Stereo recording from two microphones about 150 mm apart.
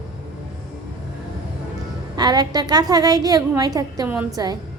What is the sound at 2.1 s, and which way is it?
A woman's voice, 25° right (ahead or behind).